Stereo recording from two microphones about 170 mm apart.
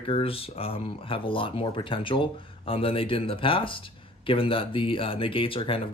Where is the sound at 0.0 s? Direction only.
35° left (ahead or behind).